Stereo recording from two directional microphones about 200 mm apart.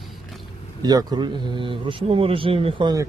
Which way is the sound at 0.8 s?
20° right (ahead or behind).